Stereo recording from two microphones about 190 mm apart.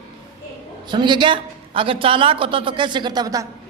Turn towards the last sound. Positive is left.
turn(degrees=-20)  # may be behind; listen again after turning